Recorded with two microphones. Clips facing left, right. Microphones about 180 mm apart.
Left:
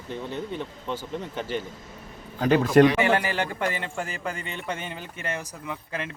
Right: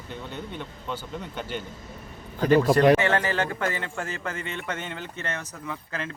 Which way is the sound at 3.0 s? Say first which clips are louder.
Even; 10° left (ahead or behind).